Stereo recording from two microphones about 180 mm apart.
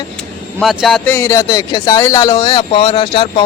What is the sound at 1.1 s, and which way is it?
Speech, 15° left (ahead or behind).